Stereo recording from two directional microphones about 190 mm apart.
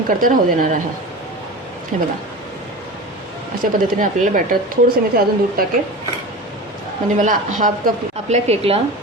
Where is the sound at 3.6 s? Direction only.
45° right (ahead or behind).